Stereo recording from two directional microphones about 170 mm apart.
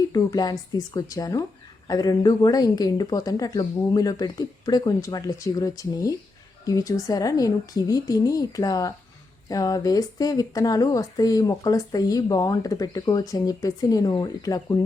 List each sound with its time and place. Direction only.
0.1 s speech: 20° left (ahead or behind)